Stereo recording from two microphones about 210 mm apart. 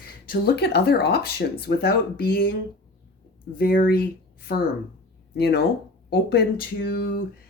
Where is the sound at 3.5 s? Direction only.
45° left (ahead or behind).